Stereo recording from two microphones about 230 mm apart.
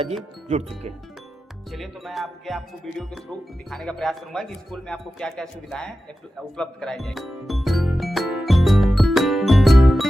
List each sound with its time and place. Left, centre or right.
0.4 s speech: right
1.7 s speech: centre
6.6 s music: centre